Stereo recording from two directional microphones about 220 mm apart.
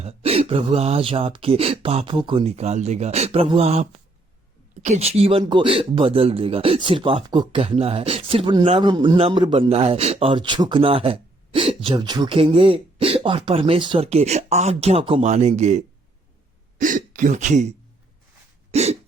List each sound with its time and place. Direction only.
0.0 s speech: 25° right (ahead or behind)
16.8 s speech: 35° right (ahead or behind)
18.7 s hiccup: 30° right (ahead or behind)